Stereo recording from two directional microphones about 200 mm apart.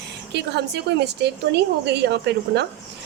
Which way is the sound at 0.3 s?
55° right (ahead or behind).